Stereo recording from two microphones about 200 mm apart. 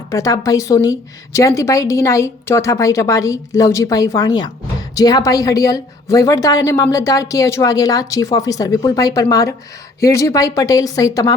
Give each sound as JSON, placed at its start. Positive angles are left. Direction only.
{"t": 0.1, "sound": "a woman's voice", "side_deg": 15}